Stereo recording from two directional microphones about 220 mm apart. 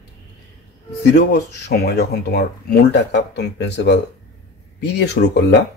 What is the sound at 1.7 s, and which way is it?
Speech, 45° left (ahead or behind).